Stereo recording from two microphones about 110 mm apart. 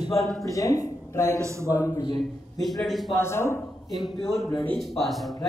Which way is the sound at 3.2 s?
25° left (ahead or behind).